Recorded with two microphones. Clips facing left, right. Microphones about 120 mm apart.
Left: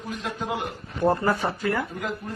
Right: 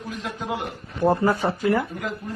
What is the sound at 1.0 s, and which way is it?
Speech, 5° right (ahead or behind).